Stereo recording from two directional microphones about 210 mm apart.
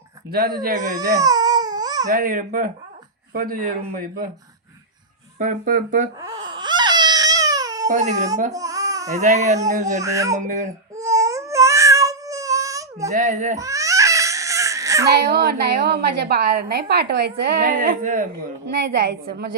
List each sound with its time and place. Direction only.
0.3 s a woman's voice: 50° right (ahead or behind)
0.9 s baby cry: 15° right (ahead or behind)
2.0 s a woman's voice: 45° right (ahead or behind)
5.4 s speech: 40° right (ahead or behind)
6.2 s baby cry: 20° right (ahead or behind)
7.9 s speech: 35° right (ahead or behind)
8.5 s babbling: 15° right (ahead or behind)
9.1 s speech: 35° right (ahead or behind)
10.0 s speech: 15° right (ahead or behind)
10.3 s speech: 35° right (ahead or behind)
10.9 s a sound: 15° right (ahead or behind)
13.1 s speech: 35° right (ahead or behind)
13.6 s baby cry: 15° right (ahead or behind)
15.0 s a woman's voice: 50° right (ahead or behind)